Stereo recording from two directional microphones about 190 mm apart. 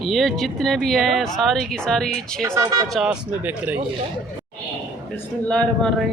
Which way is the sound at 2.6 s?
20° right (ahead or behind).